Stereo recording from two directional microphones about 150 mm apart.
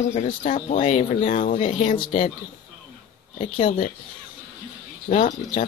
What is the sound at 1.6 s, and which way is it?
Speech, 40° left (ahead or behind).